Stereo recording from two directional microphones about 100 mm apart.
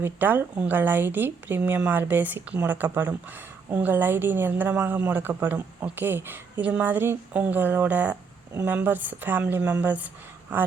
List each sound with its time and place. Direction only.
0.0 s a woman's voice: 20° right (ahead or behind)